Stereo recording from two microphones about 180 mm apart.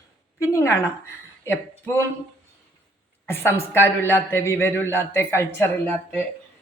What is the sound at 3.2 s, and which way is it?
A woman's voice, 10° left (ahead or behind).